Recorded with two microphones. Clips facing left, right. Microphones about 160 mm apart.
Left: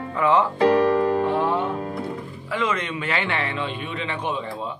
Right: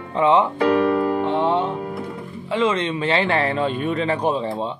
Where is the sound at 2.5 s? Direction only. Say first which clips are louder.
Right 5 dB; 25° right (ahead or behind).